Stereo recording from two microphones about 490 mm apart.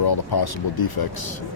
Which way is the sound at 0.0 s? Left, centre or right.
Left.